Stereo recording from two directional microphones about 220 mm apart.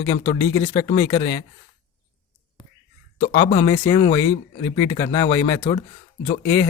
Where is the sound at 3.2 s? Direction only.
35° left (ahead or behind).